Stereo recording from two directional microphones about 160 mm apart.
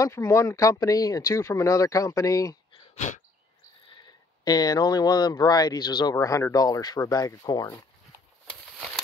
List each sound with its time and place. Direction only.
0.0 s speech: 20° left (ahead or behind)
4.5 s speech: 25° left (ahead or behind)